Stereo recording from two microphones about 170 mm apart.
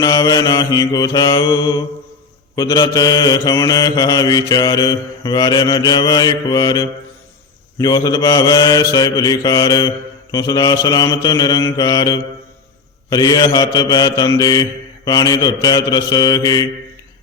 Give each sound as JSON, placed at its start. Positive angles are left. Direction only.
{"t": 0.0, "sound": "mantra", "side_deg": 20}